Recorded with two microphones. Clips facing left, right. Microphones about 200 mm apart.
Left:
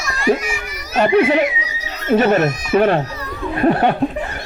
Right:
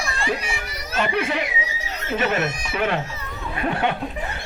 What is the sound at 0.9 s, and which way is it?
A man's voice, 50° left (ahead or behind).